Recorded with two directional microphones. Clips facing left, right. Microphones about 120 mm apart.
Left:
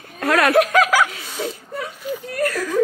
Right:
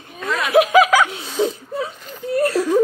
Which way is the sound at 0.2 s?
70° left (ahead or behind).